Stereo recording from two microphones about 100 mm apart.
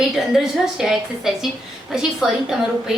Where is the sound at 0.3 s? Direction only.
5° right (ahead or behind).